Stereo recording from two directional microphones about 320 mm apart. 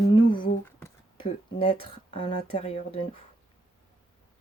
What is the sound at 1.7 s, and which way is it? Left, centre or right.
Speech, centre.